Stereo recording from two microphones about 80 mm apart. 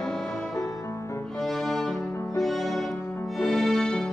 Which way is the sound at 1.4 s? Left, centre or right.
Centre.